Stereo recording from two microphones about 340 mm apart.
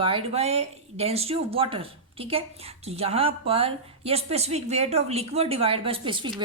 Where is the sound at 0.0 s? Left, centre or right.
Centre.